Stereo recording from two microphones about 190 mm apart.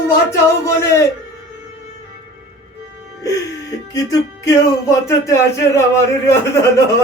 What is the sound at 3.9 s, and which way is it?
Speech, 15° left (ahead or behind).